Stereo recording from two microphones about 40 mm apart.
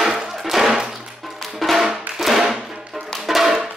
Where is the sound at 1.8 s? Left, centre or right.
Centre.